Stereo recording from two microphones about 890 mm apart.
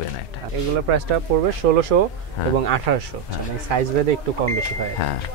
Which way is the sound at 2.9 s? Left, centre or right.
Right.